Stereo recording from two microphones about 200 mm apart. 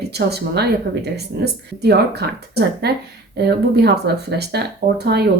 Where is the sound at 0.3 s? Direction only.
55° right (ahead or behind).